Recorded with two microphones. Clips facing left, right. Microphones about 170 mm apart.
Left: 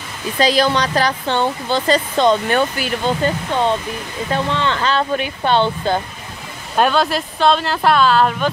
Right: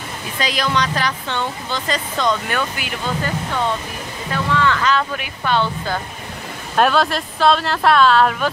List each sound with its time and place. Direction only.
0.4 s speech: 35° left (ahead or behind)
6.8 s speech: centre (ahead or behind)